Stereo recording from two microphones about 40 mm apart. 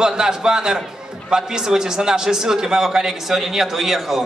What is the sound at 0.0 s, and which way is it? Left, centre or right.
A man's voice, centre.